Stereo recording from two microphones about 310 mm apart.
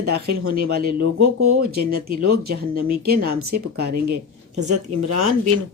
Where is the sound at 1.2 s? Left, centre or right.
Right.